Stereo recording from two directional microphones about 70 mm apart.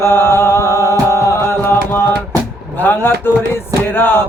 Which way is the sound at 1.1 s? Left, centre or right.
Left.